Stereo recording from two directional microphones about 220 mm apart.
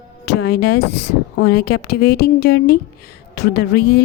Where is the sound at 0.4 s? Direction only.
45° left (ahead or behind).